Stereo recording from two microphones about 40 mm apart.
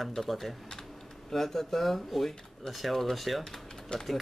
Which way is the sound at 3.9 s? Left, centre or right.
Left.